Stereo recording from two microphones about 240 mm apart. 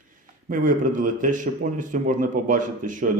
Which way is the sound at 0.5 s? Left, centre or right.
Right.